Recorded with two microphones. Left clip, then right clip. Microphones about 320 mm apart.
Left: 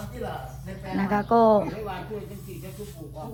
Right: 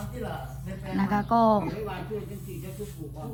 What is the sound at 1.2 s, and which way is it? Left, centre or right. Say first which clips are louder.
Speech: left 4 dB; centre.